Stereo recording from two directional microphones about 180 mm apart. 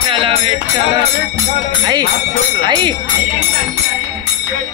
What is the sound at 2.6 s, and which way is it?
Speech, 25° right (ahead or behind).